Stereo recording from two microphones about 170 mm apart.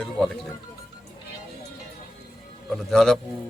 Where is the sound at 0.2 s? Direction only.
5° left (ahead or behind).